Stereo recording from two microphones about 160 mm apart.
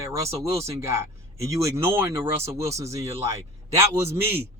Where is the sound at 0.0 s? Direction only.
20° right (ahead or behind).